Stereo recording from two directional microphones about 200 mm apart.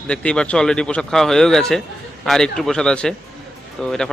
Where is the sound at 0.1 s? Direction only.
5° left (ahead or behind).